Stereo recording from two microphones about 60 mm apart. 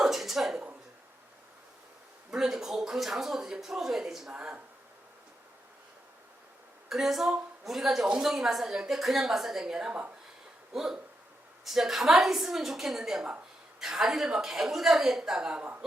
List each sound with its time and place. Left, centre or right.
0.0 s a sound: centre
2.3 s speech: centre
4.3 s a woman's voice: centre
6.8 s a woman's voice: centre; by 15.8 s right